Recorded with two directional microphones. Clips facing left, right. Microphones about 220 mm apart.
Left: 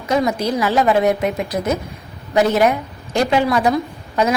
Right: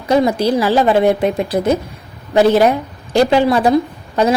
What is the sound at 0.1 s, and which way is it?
A woman's voice, 30° right (ahead or behind).